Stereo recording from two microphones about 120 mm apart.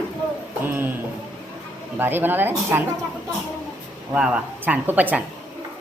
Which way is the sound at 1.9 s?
15° right (ahead or behind).